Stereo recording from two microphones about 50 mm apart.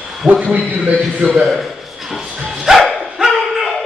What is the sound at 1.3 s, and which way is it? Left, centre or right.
Speech, centre.